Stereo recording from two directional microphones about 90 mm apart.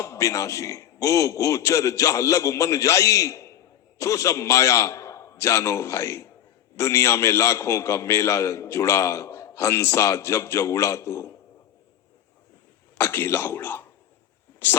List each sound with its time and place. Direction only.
0.0 s a man's voice: 35° left (ahead or behind)
13.0 s speech: 25° left (ahead or behind)